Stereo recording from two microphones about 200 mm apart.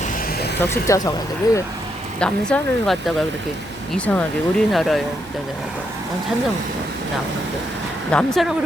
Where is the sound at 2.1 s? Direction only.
5° left (ahead or behind).